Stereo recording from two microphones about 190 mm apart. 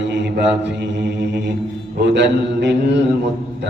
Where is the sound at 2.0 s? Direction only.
65° right (ahead or behind).